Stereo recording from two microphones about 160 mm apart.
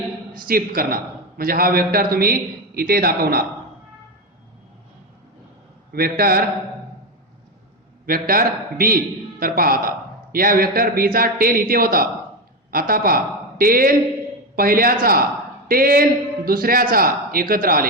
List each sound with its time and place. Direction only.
0.4 s a man's voice: 65° right (ahead or behind)
5.9 s a man's voice: 70° right (ahead or behind)
8.0 s a man's voice: 65° right (ahead or behind)